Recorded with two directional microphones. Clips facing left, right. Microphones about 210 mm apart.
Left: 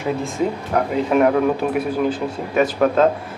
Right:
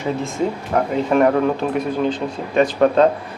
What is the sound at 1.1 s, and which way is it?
A man's voice, 5° left (ahead or behind).